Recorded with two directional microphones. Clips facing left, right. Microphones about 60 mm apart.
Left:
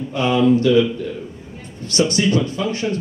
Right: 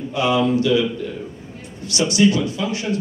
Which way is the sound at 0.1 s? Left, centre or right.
Left.